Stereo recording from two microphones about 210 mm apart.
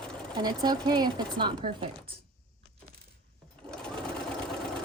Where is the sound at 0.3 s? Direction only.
20° right (ahead or behind).